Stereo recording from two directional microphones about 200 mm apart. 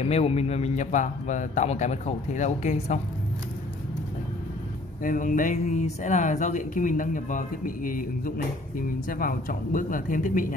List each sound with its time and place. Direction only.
0.1 s speech: 30° left (ahead or behind)
5.0 s speech: 40° left (ahead or behind)